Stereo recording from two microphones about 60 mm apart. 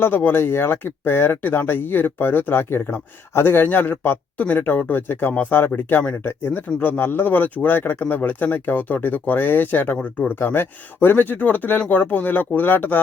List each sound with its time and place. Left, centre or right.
0.0 s speech: left